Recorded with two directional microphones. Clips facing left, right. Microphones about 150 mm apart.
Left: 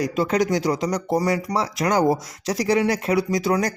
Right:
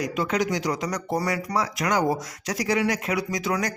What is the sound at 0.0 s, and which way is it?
Speech, 35° left (ahead or behind).